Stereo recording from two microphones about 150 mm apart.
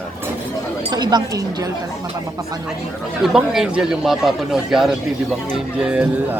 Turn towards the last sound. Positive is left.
turn(degrees=-5)  # may be behind; listen again after turning